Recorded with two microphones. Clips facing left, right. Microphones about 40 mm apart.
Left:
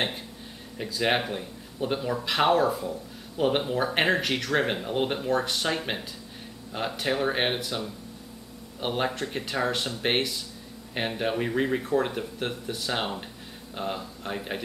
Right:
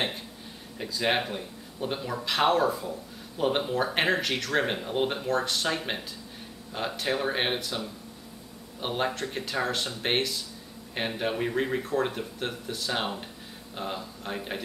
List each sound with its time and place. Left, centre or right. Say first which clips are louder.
0.7 s a man's voice: left 1 dB; centre
8.8 s a man's voice: left 1 dB; centre